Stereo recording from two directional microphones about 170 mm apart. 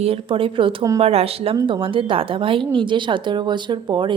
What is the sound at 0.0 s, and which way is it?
Speech, 35° right (ahead or behind).